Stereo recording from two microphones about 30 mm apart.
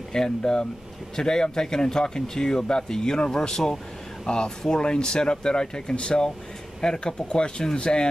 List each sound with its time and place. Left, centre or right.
0.1 s speech: left
6.8 s speech: centre
7.2 s speech: left